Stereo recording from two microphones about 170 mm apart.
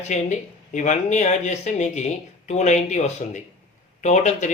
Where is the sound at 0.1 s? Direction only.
45° left (ahead or behind).